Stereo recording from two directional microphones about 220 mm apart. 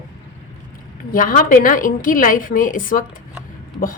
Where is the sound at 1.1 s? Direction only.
40° left (ahead or behind).